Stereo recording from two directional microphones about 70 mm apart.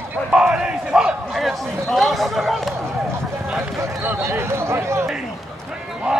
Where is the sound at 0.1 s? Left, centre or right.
Centre.